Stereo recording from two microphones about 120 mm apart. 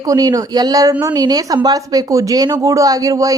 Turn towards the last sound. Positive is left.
turn(degrees=-30)  # may be behind; listen again after turning